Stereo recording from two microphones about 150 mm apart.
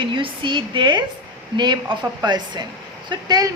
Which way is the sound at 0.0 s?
35° right (ahead or behind).